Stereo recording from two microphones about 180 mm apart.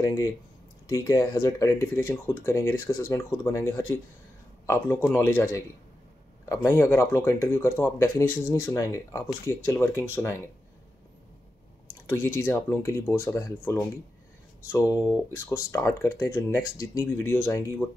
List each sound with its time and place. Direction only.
0.0 s speech: 20° left (ahead or behind)
12.1 s speech: 15° left (ahead or behind)